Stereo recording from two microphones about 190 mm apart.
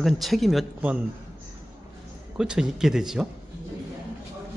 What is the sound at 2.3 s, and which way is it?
Speech, 5° right (ahead or behind).